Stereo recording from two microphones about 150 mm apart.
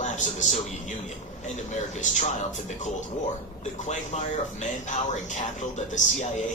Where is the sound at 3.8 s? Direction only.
50° left (ahead or behind).